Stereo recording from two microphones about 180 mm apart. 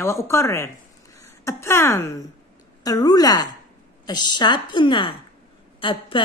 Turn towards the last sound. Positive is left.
turn(degrees=30)  # may be behind; listen again after turning